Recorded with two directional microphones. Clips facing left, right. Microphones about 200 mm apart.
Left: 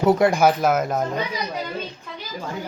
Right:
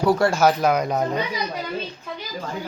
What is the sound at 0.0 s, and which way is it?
Speech, 20° left (ahead or behind).